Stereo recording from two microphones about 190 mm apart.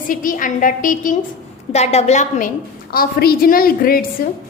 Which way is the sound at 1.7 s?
35° left (ahead or behind).